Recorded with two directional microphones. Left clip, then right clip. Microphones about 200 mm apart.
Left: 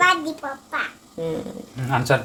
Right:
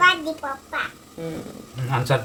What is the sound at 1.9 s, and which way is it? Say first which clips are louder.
Speech: left 3 dB; 30° left (ahead or behind).